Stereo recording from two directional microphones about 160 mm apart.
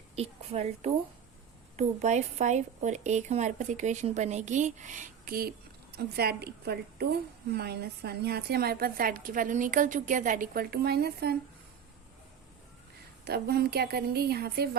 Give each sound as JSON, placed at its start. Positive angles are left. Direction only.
{"t": 0.2, "sound": "a woman's voice", "side_deg": -40}
{"t": 13.2, "sound": "a woman's voice", "side_deg": -80}